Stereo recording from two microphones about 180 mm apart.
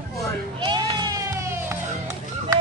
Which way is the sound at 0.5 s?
25° right (ahead or behind).